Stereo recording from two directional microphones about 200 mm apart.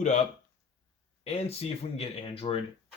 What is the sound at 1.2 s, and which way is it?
Speech, 30° left (ahead or behind).